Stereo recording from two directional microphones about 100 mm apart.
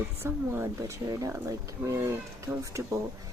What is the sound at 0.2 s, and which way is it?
Speech, 25° right (ahead or behind).